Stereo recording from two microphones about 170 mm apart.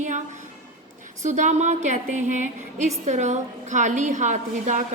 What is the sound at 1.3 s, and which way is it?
A woman's voice, 45° right (ahead or behind).